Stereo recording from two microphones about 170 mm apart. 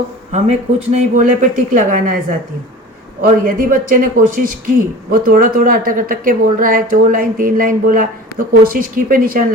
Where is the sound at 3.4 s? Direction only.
50° right (ahead or behind).